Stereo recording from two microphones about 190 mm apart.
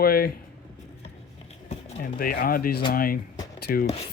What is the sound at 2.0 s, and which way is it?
Speech, 50° left (ahead or behind).